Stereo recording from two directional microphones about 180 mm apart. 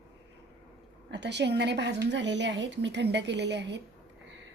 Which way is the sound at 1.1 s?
75° right (ahead or behind).